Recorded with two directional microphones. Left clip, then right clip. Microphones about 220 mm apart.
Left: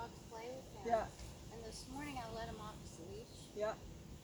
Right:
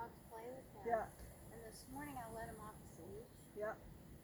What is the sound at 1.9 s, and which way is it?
Speech, centre (ahead or behind).